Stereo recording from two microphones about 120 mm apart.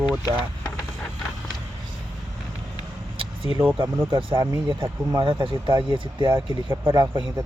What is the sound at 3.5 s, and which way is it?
Speech, 20° right (ahead or behind).